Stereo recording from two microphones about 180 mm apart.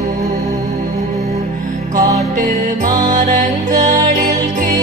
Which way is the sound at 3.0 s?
45° right (ahead or behind).